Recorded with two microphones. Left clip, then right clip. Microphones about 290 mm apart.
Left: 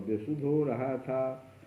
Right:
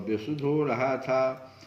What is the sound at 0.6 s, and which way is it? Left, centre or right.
Speech, centre.